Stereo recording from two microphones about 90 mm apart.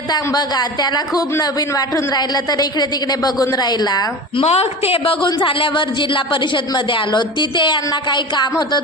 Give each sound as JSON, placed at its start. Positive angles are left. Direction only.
{"t": 0.3, "sound": "a man's voice", "side_deg": 50}
{"t": 4.4, "sound": "a woman's voice", "side_deg": 85}